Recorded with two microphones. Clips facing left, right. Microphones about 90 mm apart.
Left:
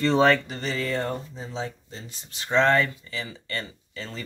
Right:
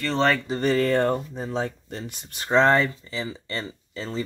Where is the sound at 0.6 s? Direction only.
50° right (ahead or behind).